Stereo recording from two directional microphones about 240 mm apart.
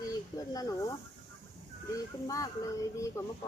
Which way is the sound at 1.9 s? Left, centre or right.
Centre.